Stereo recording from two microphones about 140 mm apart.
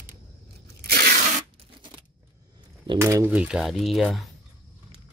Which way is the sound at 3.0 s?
20° right (ahead or behind).